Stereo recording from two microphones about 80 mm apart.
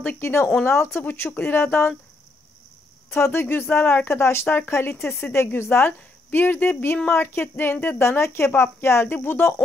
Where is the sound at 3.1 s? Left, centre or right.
Left.